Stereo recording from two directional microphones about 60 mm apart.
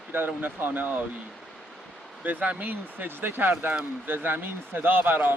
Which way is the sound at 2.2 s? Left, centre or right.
Right.